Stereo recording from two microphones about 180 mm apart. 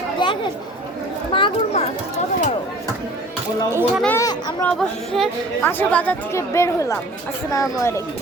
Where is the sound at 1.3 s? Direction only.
30° left (ahead or behind).